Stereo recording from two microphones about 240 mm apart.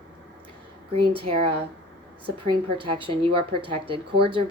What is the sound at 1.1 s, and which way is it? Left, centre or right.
Speech, right.